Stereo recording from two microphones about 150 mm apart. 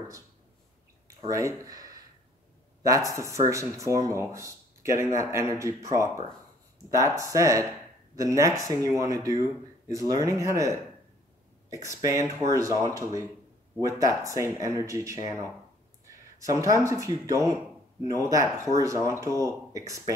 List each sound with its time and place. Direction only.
1.3 s speech: 25° right (ahead or behind)
11.8 s speech: 20° right (ahead or behind)
16.3 s speech: 20° right (ahead or behind)